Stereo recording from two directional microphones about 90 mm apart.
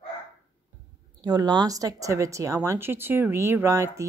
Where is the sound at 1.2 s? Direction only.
45° right (ahead or behind).